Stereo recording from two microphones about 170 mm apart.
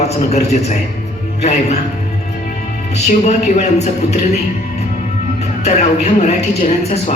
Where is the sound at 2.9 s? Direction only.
40° left (ahead or behind).